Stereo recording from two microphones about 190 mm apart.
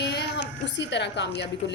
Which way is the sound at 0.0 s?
60° left (ahead or behind).